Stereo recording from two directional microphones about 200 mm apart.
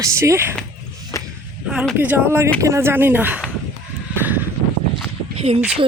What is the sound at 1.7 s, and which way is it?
Speech, 5° right (ahead or behind).